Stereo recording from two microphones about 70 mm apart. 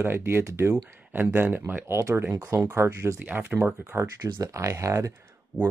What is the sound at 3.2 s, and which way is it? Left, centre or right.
Speech, right.